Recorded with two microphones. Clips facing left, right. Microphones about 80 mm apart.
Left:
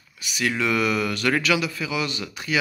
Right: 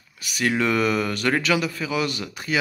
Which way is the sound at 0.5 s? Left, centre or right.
Right.